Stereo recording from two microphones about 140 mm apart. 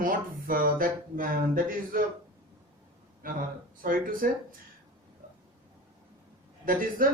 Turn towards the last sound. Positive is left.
turn(degrees=-85)